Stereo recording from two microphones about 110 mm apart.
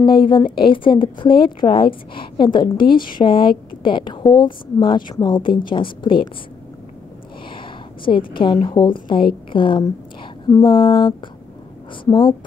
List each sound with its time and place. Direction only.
0.0 s a woman's voice: 50° left (ahead or behind)
7.5 s a sound: 50° left (ahead or behind)
8.5 s a woman's voice: 45° left (ahead or behind)